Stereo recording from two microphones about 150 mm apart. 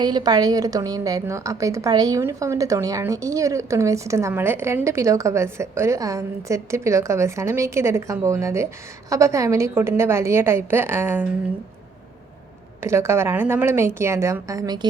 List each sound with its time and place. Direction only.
0.0 s a woman's voice: 30° right (ahead or behind)
12.8 s a woman's voice: 15° right (ahead or behind)